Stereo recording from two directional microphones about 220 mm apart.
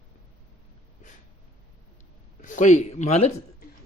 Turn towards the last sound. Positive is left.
turn(degrees=30)  # may be behind; listen again after turning